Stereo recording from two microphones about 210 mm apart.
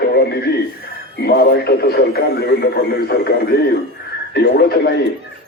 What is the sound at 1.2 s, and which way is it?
Speech, 50° left (ahead or behind).